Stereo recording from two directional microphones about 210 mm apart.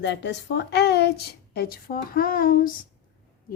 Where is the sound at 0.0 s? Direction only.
55° left (ahead or behind).